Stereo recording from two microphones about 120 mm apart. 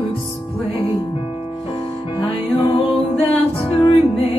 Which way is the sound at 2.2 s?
50° left (ahead or behind).